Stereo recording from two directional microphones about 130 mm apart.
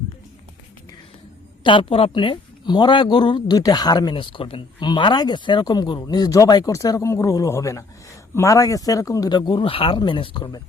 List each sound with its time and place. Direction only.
1.6 s speech: 40° left (ahead or behind)